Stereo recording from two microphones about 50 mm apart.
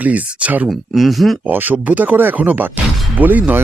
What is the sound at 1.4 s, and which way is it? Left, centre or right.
Speech, right.